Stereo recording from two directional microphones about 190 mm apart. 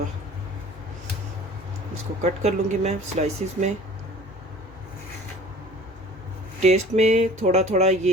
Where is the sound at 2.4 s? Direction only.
35° right (ahead or behind).